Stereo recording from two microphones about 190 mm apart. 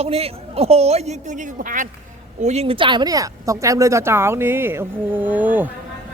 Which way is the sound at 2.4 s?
35° right (ahead or behind).